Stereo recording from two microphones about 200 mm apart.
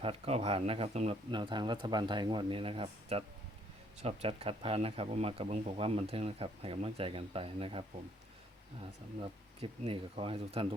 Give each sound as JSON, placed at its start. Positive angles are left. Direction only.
{"t": 0.0, "sound": "speech", "side_deg": -30}
{"t": 9.6, "sound": "speech", "side_deg": -30}